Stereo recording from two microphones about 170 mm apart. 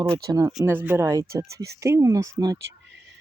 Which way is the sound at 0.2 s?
20° right (ahead or behind).